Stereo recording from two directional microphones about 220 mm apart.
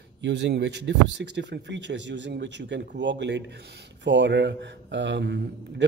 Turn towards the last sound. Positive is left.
turn(degrees=-55)  # may be behind; listen again after turning